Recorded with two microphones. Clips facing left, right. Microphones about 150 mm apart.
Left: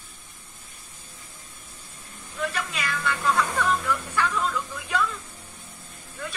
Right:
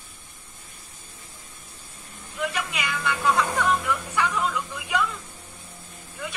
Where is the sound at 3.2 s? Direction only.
15° right (ahead or behind).